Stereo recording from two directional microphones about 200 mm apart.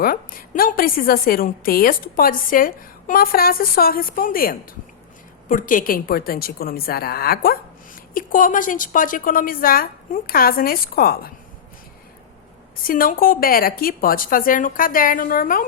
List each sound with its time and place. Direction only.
0.0 s a woman's voice: 45° left (ahead or behind)
12.7 s a woman's voice: 45° left (ahead or behind)